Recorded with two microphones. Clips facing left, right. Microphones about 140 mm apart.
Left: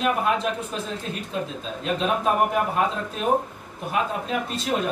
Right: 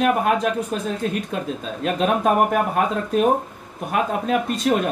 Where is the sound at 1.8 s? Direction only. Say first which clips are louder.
Right 4 dB; 55° right (ahead or behind).